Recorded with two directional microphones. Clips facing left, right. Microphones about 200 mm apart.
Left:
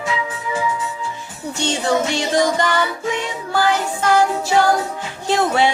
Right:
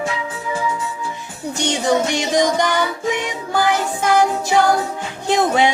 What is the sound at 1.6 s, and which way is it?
Music, 15° right (ahead or behind).